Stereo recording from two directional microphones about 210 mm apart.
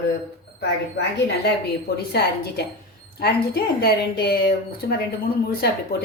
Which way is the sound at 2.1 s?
50° left (ahead or behind).